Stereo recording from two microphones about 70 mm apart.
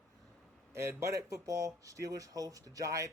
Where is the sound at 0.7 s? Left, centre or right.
Right.